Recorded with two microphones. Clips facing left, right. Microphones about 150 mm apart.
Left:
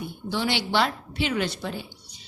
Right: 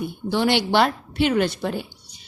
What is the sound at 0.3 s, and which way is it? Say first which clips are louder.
A woman's voice: right 6 dB; 55° right (ahead or behind).